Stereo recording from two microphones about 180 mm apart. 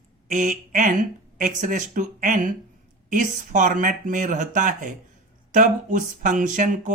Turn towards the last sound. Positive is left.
turn(degrees=-45)  # may be behind; listen again after turning